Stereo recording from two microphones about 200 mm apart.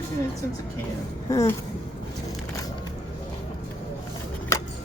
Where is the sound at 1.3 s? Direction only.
15° left (ahead or behind).